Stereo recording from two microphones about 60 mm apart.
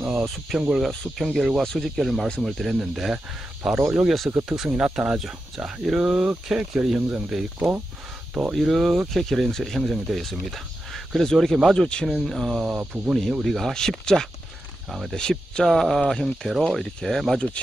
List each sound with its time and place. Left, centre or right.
0.0 s speech: centre
4.3 s speech: right
6.5 s speech: centre
7.5 s speech: right
8.5 s speech: centre
9.1 s speech: centre
11.7 s speech: centre
12.3 s speech: centre
12.6 s speech: right
13.4 s speech: centre
14.9 s speech: centre
15.1 s speech: centre